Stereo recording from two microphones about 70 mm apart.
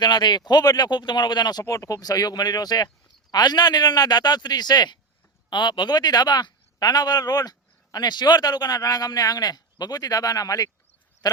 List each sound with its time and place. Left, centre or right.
0.0 s speech: left
1.6 s speech: left
7.9 s speech: left